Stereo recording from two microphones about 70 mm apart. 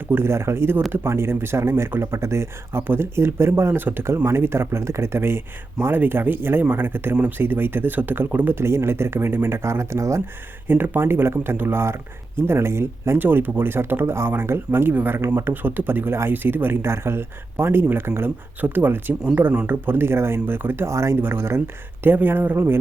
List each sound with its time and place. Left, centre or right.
0.1 s speech: right
10.7 s speech: right